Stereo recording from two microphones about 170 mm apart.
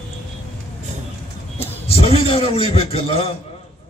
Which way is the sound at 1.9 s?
35° left (ahead or behind).